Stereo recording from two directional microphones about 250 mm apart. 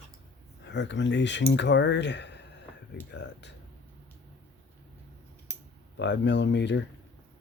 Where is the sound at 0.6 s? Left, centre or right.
Left.